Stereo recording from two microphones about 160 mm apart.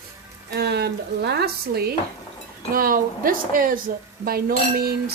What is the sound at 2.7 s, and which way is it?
Speech, 65° right (ahead or behind).